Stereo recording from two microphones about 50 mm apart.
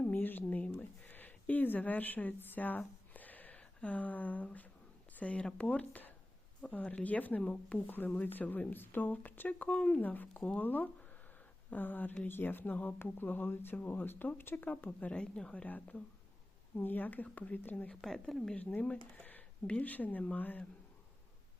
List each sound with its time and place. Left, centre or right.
0.0 s a sound: left
4.4 s speech: left
6.6 s speech: centre
7.0 s speech: left
7.9 s speech: left
9.6 s speech: left
13.5 s speech: left
13.7 s speech: left
15.1 s speech: centre
15.6 s speech: left
18.0 s a woman's voice: centre
18.5 s speech: left